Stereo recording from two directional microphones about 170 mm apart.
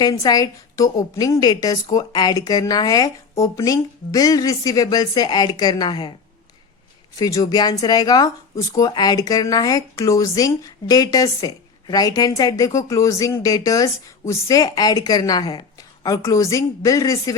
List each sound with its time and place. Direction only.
0.0 s speech: 20° left (ahead or behind)
7.2 s speech: 20° left (ahead or behind)